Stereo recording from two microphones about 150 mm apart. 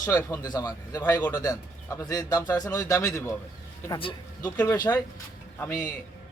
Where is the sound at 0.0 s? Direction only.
25° left (ahead or behind).